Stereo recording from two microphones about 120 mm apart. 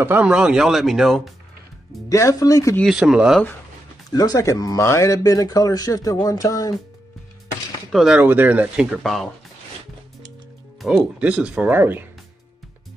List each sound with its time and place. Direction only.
0.0 s speech: 15° right (ahead or behind)
2.0 s speech: 25° left (ahead or behind)
2.8 s speech: 5° right (ahead or behind)
4.1 s speech: 30° left (ahead or behind)
7.9 s speech: centre (ahead or behind)
8.2 s speech: 15° right (ahead or behind)
10.8 s speech: 5° right (ahead or behind)